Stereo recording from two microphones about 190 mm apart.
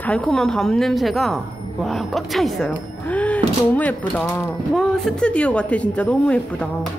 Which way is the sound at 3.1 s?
5° left (ahead or behind).